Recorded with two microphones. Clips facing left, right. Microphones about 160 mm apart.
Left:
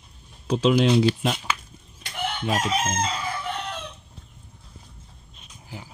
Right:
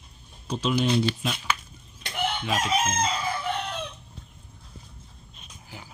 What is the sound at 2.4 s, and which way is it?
Chicken, 50° left (ahead or behind).